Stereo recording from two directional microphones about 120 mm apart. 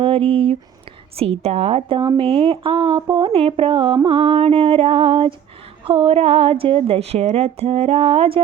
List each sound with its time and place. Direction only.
0.0 s a woman's voice: 50° right (ahead or behind)
2.0 s a sound: 45° right (ahead or behind)
5.8 s a woman's voice: 50° right (ahead or behind)